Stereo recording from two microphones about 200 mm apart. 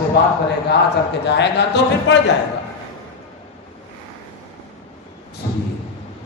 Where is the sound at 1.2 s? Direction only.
60° left (ahead or behind).